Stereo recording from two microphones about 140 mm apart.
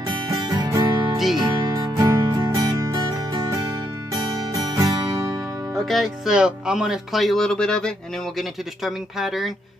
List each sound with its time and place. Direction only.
0.5 s music: 25° right (ahead or behind)
1.1 s music: centre (ahead or behind)
1.4 s music: 30° right (ahead or behind)
5.9 s speech: centre (ahead or behind)